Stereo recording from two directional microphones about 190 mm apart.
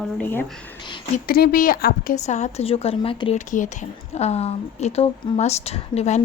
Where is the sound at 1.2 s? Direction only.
50° left (ahead or behind).